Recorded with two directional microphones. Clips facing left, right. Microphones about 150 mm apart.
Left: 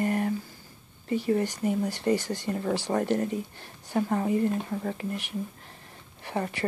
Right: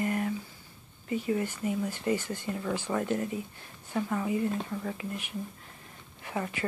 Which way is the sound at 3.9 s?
40° left (ahead or behind).